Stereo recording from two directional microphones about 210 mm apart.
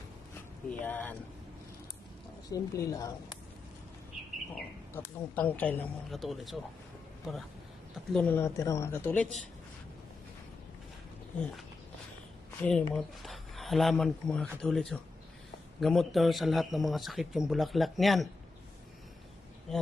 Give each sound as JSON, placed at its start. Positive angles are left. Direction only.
{"t": 0.7, "sound": "speech", "side_deg": 10}
{"t": 2.5, "sound": "speech", "side_deg": 15}
{"t": 4.9, "sound": "speech", "side_deg": 10}
{"t": 8.1, "sound": "speech", "side_deg": 5}
{"t": 12.6, "sound": "speech", "side_deg": 5}